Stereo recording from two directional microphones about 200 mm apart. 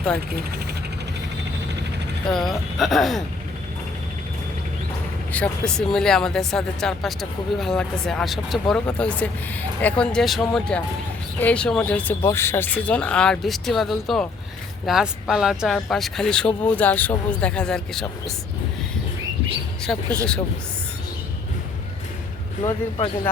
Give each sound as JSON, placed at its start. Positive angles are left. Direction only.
{"t": 2.4, "sound": "a woman's voice", "side_deg": 0}
{"t": 5.3, "sound": "a woman's voice", "side_deg": 5}
{"t": 19.8, "sound": "a woman's voice", "side_deg": 5}
{"t": 22.6, "sound": "a man's voice", "side_deg": 40}